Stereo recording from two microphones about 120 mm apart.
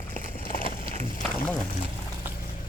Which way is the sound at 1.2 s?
5° left (ahead or behind).